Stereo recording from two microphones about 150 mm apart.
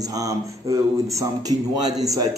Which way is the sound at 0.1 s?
25° right (ahead or behind).